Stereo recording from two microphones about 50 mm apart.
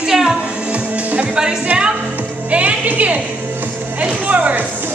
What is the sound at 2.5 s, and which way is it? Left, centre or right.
Music, right.